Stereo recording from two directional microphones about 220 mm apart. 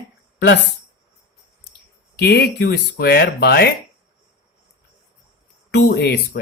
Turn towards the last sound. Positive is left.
turn(degrees=45)  # may be behind; listen again after turning